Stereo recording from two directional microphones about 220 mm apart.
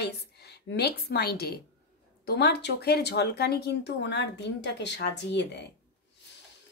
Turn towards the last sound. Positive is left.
turn(degrees=50)  # may be behind; listen again after turning